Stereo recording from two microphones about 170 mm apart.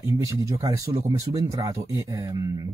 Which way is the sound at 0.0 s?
20° right (ahead or behind).